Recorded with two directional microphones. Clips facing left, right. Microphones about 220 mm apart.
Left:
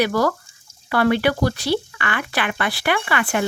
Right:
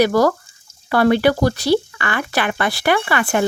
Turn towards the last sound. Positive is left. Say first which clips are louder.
# right 4 dB
turn(degrees=-40)  # may be behind; listen again after turning